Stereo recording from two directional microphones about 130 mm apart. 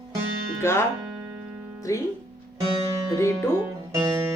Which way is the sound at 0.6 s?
20° left (ahead or behind).